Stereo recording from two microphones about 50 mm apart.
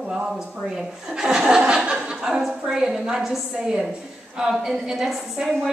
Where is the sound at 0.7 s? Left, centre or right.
Centre.